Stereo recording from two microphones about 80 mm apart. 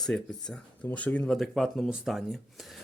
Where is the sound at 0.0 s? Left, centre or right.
Centre.